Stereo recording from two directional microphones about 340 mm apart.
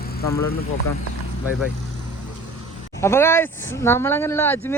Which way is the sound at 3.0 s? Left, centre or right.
Centre.